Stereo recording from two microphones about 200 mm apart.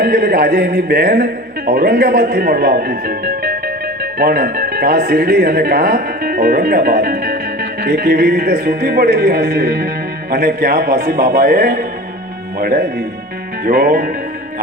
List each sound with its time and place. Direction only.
0.0 s speech: 50° right (ahead or behind)